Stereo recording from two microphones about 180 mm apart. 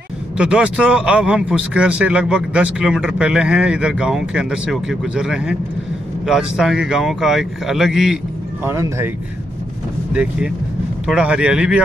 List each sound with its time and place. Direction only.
0.4 s speech: 5° right (ahead or behind)
8.6 s speech: 15° right (ahead or behind)
11.1 s speech: 5° right (ahead or behind)